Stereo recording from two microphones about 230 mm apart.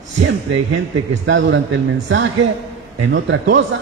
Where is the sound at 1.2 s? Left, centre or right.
Right.